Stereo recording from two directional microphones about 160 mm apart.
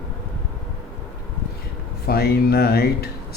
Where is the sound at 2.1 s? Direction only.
75° left (ahead or behind).